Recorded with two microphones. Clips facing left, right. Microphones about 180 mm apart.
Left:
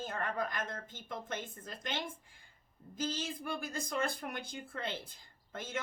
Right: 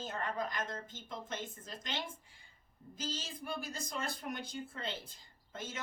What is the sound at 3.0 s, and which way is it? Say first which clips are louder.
Speech: left 5 dB; 55° left (ahead or behind).